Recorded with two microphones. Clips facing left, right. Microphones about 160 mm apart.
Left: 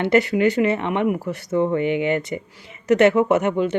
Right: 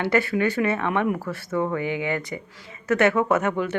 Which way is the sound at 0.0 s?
20° left (ahead or behind).